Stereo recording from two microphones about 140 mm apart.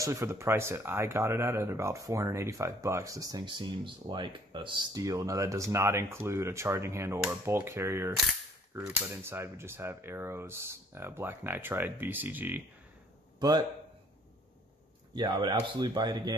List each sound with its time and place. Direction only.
0.0 s speech: 20° right (ahead or behind)
15.1 s speech: 30° right (ahead or behind)